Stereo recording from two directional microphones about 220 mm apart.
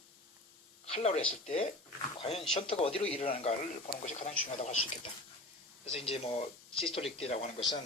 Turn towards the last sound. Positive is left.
turn(degrees=25)  # may be behind; listen again after turning